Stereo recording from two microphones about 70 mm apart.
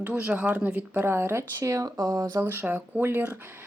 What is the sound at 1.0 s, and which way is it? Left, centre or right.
Speech, right.